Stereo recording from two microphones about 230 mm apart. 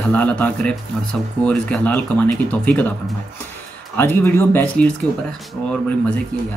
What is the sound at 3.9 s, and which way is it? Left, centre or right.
Speech, centre.